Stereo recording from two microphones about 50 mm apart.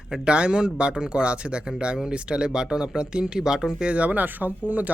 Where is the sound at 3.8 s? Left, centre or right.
Right.